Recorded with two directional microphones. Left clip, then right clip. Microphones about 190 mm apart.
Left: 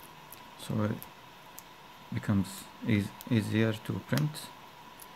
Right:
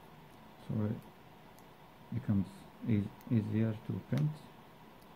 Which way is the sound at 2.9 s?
40° left (ahead or behind).